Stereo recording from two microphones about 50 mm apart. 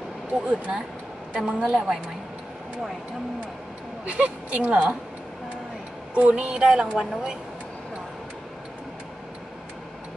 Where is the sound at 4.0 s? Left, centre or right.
Right.